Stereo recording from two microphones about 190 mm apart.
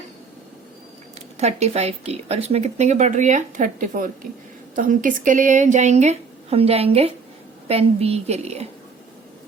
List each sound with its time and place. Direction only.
1.4 s speech: 35° right (ahead or behind)